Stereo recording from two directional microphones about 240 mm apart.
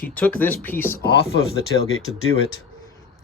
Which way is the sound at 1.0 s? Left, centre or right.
Left.